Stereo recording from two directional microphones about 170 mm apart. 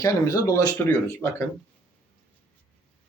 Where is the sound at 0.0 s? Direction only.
20° left (ahead or behind).